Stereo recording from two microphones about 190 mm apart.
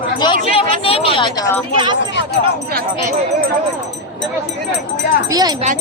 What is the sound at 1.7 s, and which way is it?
Speech, 25° right (ahead or behind).